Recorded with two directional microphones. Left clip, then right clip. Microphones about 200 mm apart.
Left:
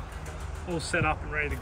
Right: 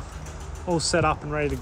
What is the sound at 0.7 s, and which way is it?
Speech, 15° right (ahead or behind).